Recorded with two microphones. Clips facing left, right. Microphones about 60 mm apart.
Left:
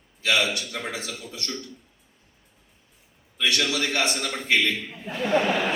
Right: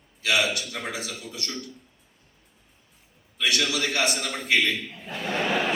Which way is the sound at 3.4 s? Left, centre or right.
Left.